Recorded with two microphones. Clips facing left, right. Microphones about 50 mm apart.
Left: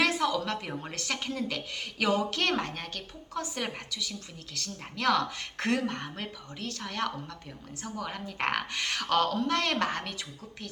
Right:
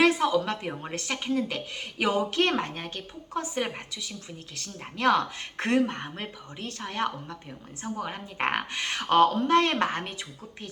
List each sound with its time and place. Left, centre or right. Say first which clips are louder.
0.0 s a woman's voice: right 5 dB; centre